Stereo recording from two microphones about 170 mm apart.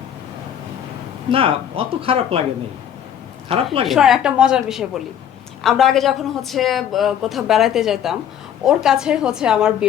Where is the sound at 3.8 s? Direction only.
Centre (ahead or behind).